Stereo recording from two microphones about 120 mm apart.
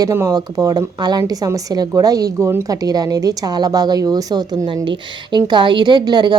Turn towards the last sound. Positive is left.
turn(degrees=-35)  # may be behind; listen again after turning